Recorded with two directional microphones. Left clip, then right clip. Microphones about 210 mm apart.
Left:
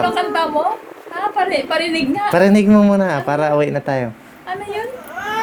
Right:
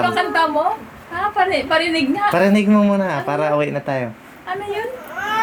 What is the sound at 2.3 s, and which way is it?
Speech, 60° left (ahead or behind).